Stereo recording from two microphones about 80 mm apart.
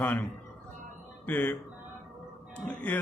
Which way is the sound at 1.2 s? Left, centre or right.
Left.